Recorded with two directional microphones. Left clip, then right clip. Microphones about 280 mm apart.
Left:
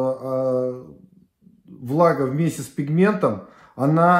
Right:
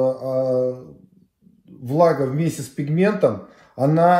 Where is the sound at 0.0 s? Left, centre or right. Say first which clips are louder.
Right 2 dB; centre.